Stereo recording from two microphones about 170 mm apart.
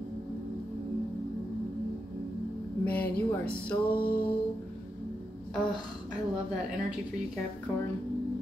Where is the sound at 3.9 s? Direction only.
60° left (ahead or behind).